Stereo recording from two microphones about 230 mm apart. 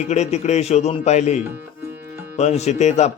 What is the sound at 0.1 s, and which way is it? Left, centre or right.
A man's voice, left.